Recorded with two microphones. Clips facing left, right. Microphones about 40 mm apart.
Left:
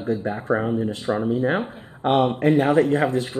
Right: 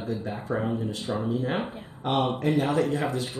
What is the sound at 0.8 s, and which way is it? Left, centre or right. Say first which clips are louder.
Speech: left 6 dB; left.